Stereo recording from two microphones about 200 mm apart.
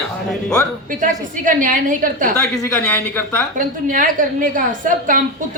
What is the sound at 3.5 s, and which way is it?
A woman's voice, 40° right (ahead or behind).